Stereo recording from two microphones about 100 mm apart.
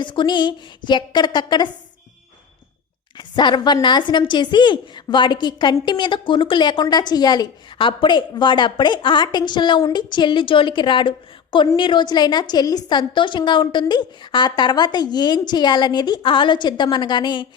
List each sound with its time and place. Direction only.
0.0 s a woman's voice: 55° left (ahead or behind)
3.2 s a woman's voice: 50° left (ahead or behind)
6.8 s a woman's voice: 45° left (ahead or behind)